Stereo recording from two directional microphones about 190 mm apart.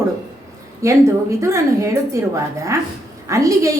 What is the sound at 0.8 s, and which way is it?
A woman's voice, 15° right (ahead or behind).